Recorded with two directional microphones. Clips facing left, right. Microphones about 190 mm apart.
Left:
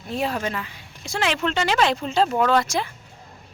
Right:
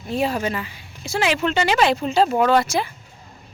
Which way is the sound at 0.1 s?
Centre (ahead or behind).